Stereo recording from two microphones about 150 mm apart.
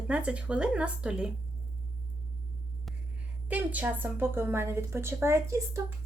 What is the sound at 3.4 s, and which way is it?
A woman's voice, 10° right (ahead or behind).